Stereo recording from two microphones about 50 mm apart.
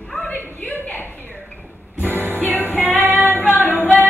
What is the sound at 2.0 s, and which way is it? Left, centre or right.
Music, right.